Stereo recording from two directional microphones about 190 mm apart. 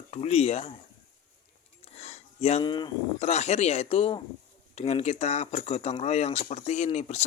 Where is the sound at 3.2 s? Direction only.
35° left (ahead or behind).